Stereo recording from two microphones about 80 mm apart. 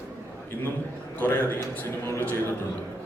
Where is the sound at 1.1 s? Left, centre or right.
Left.